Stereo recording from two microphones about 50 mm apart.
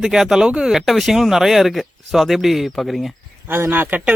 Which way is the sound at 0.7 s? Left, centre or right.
Centre.